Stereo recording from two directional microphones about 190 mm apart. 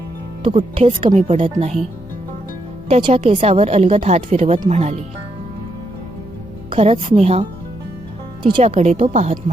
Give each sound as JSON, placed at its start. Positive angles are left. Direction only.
{"t": 0.4, "sound": "a woman's voice", "side_deg": -30}
{"t": 2.9, "sound": "a woman's voice", "side_deg": -35}
{"t": 6.7, "sound": "a woman's voice", "side_deg": -30}
{"t": 8.4, "sound": "a woman's voice", "side_deg": -30}